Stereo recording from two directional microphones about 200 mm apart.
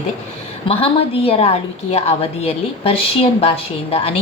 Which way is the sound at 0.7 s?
30° left (ahead or behind).